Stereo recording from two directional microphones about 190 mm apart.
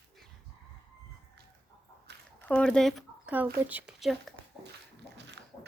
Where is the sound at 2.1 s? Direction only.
65° right (ahead or behind).